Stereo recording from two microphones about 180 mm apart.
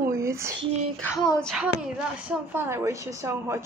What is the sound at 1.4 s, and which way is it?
Speech, centre (ahead or behind).